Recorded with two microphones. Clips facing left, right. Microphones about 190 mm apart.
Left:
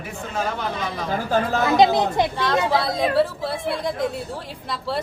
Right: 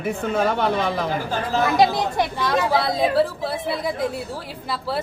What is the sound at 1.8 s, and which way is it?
Speech, 20° left (ahead or behind).